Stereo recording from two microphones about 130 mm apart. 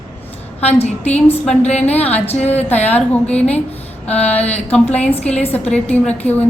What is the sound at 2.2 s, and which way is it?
Speech, 55° left (ahead or behind).